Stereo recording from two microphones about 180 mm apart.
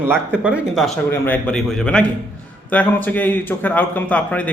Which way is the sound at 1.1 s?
10° left (ahead or behind).